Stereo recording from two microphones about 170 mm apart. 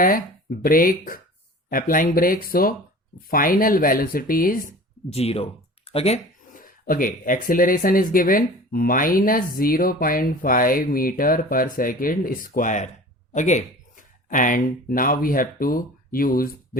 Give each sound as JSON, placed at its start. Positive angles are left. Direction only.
{"t": 0.6, "sound": "speech", "side_deg": 55}
{"t": 5.0, "sound": "speech", "side_deg": 35}
{"t": 6.5, "sound": "a sound", "side_deg": 55}
{"t": 7.4, "sound": "speech", "side_deg": 55}